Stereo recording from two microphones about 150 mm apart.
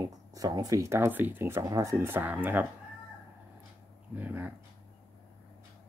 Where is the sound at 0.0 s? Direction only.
25° right (ahead or behind).